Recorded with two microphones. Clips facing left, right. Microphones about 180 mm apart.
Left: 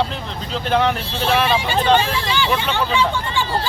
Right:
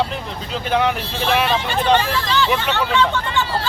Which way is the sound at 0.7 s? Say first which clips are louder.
Left 1 dB; 5° right (ahead or behind).